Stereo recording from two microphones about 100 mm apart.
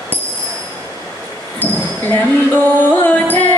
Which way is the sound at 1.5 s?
20° left (ahead or behind).